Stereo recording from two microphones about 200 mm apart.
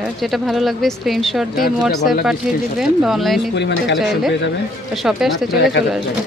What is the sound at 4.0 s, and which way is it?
Speech, centre (ahead or behind).